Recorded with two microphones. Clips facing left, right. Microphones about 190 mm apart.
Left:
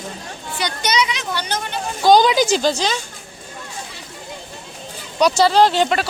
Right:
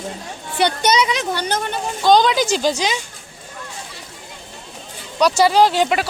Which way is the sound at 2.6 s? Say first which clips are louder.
Even; 15° right (ahead or behind).